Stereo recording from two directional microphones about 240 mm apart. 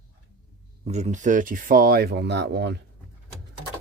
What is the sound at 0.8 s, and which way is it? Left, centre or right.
Speech, right.